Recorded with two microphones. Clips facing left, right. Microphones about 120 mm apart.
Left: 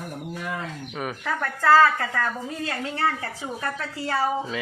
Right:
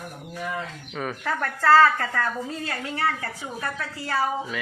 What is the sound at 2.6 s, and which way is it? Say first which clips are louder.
Speech: left 2 dB; 25° left (ahead or behind).